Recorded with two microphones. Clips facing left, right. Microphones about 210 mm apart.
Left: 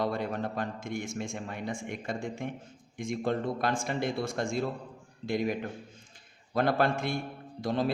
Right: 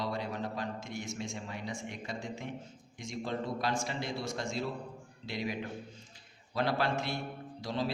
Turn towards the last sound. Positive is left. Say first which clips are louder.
# left 5 dB
turn(degrees=50)  # may be behind; listen again after turning